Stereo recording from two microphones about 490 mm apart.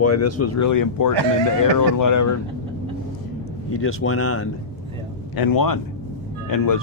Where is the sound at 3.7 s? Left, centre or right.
Left.